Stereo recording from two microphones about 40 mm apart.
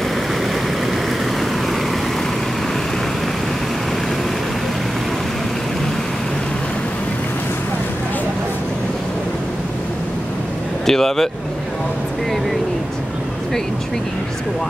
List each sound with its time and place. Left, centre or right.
10.9 s speech: centre